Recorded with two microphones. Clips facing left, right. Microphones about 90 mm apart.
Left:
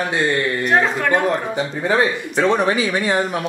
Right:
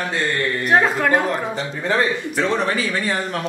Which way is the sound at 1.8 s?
10° left (ahead or behind).